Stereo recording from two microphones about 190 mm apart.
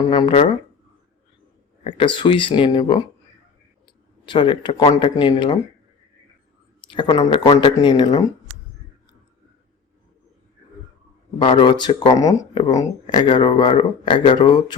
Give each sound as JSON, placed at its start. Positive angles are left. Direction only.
{"t": 0.1, "sound": "speech", "side_deg": 25}
{"t": 1.8, "sound": "speech", "side_deg": 30}
{"t": 4.3, "sound": "speech", "side_deg": 25}
{"t": 6.8, "sound": "speech", "side_deg": 25}
{"t": 11.3, "sound": "speech", "side_deg": 25}